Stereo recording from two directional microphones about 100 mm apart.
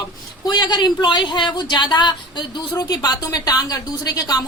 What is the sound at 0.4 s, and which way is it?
A woman's voice, 45° left (ahead or behind).